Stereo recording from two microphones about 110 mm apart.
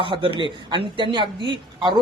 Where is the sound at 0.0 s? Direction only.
55° right (ahead or behind).